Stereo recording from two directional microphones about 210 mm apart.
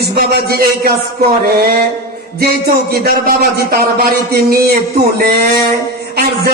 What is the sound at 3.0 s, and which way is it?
Speech, 45° right (ahead or behind).